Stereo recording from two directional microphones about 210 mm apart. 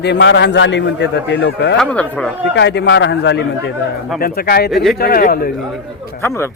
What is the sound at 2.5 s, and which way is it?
A man's voice, 55° left (ahead or behind).